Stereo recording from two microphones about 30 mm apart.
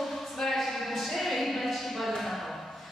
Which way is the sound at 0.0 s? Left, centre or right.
Centre.